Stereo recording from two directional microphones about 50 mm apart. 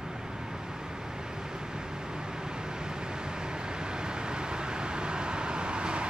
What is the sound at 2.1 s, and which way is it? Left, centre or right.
Vehicle, centre.